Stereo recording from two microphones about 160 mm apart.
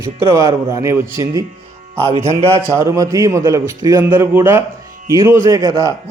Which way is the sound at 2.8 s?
20° right (ahead or behind).